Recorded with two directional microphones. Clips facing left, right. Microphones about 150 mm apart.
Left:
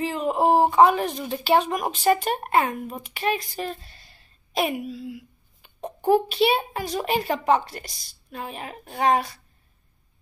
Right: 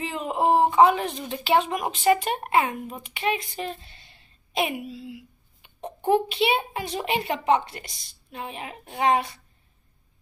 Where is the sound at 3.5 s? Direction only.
25° right (ahead or behind).